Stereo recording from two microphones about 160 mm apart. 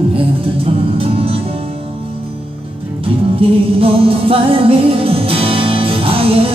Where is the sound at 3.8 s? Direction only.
35° right (ahead or behind).